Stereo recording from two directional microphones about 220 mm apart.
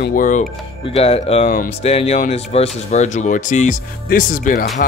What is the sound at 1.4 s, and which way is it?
Speech, 40° left (ahead or behind).